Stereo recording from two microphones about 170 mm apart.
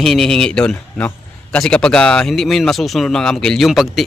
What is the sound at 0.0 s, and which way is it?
Speech, centre (ahead or behind).